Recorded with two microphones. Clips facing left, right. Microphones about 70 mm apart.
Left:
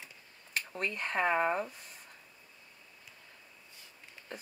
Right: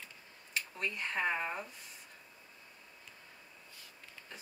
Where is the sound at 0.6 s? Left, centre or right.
Left.